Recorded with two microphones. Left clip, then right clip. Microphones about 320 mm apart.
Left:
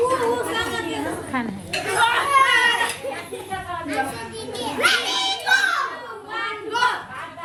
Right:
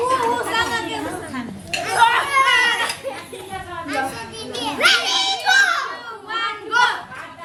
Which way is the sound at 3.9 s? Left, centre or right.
Centre.